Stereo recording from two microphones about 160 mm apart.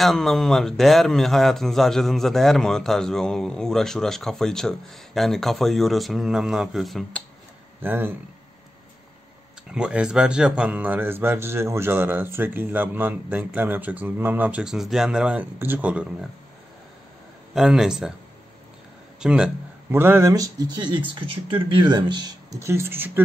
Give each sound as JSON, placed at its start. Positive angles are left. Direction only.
{"t": 0.0, "sound": "a man's voice", "side_deg": 0}
{"t": 7.8, "sound": "a man's voice", "side_deg": -10}
{"t": 9.7, "sound": "a man's voice", "side_deg": -5}
{"t": 17.6, "sound": "a man's voice", "side_deg": -5}
{"t": 19.1, "sound": "a man's voice", "side_deg": -5}